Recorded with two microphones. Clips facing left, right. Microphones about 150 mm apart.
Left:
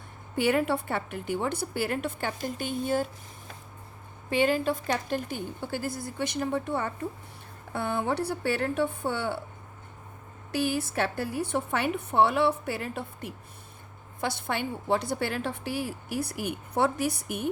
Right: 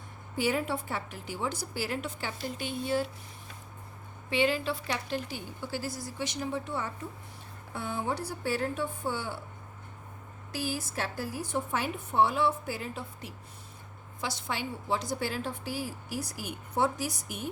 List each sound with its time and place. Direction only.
0.3 s a woman's voice: 60° left (ahead or behind)
4.3 s a woman's voice: 45° left (ahead or behind); by 9.4 s 65° left (ahead or behind)
10.5 s a woman's voice: 60° left (ahead or behind)